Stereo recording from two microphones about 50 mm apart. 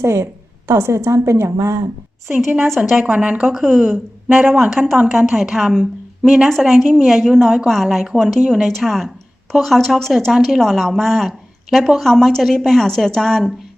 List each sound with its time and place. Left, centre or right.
0.0 s a woman's voice: right
2.2 s a woman's voice: centre
3.0 s a woman's voice: right; by 8.2 s centre
8.6 s a woman's voice: centre
12.0 s a woman's voice: centre